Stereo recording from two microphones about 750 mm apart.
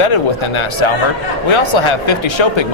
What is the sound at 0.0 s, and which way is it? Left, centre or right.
A man's voice, left.